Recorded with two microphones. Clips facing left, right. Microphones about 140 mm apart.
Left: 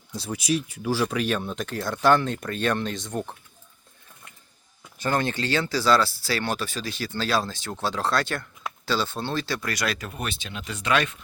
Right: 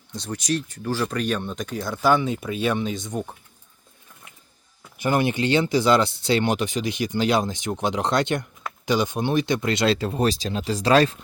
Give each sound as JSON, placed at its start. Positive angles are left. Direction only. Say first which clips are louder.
{"t": 0.1, "sound": "speech", "louder": "even", "side_deg": 5}
{"t": 4.9, "sound": "speech", "louder": "right 4 dB", "side_deg": -15}